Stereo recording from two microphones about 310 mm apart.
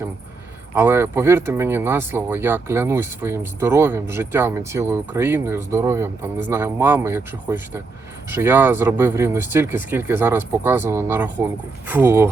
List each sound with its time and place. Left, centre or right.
0.8 s speech: centre